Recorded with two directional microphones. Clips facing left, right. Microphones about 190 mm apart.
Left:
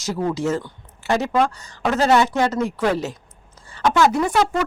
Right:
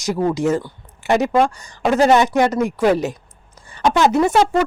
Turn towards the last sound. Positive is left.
turn(degrees=-20)  # may be behind; listen again after turning